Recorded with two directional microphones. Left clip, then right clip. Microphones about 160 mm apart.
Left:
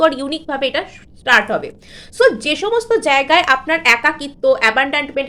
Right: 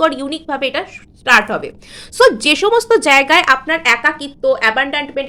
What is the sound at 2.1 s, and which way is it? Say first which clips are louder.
A woman's voice: right 3 dB; 35° right (ahead or behind).